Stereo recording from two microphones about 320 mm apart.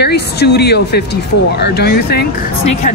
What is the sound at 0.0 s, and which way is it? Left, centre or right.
Speech, left.